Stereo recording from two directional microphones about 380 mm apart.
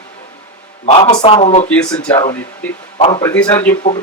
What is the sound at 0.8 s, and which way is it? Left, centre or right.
Speech, centre.